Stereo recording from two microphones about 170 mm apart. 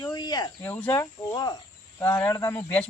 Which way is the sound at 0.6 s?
10° left (ahead or behind).